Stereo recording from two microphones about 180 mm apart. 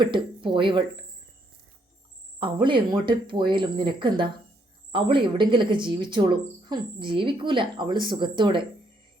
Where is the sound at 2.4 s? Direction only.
25° right (ahead or behind).